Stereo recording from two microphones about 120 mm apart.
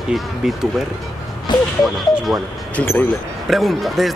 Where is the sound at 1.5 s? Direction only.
40° left (ahead or behind).